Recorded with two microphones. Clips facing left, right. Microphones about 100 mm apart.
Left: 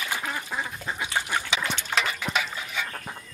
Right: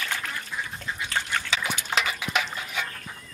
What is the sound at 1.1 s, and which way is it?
Dog, 15° left (ahead or behind).